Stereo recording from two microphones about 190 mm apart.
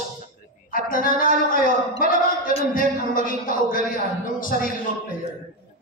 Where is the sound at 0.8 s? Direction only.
45° left (ahead or behind).